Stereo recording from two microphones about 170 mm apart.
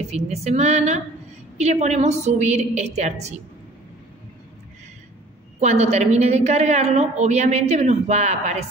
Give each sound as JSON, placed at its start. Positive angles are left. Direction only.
{"t": 0.0, "sound": "a woman's voice", "side_deg": -40}
{"t": 5.6, "sound": "a woman's voice", "side_deg": -40}